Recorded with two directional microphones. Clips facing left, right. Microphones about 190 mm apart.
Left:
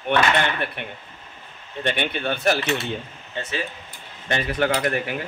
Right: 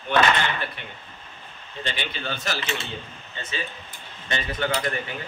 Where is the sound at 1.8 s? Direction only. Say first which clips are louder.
Left 7 dB; 60° left (ahead or behind).